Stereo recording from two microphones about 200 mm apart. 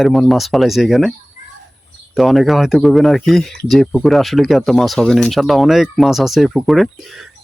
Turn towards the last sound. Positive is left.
turn(degrees=0)  # may be behind; listen again after turning